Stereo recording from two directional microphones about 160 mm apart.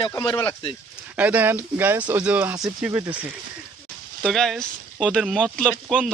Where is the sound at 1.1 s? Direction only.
10° right (ahead or behind).